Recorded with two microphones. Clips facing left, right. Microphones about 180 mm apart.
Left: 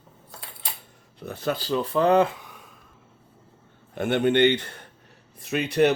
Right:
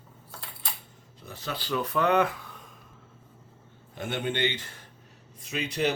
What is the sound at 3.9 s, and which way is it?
Speech, 65° left (ahead or behind).